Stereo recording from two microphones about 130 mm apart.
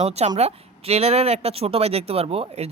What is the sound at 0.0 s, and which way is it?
Speech, 55° right (ahead or behind).